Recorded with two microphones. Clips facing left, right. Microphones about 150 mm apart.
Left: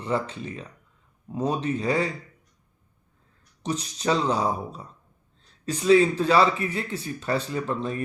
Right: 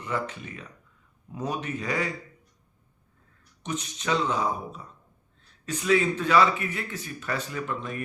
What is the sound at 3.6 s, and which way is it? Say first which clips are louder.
A man's voice: left 5 dB; 35° left (ahead or behind).